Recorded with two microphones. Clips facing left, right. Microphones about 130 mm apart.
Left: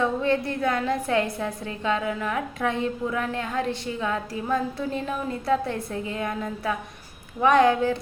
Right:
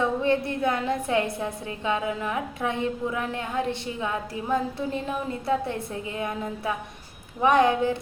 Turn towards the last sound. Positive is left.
turn(degrees=-20)  # may be behind; listen again after turning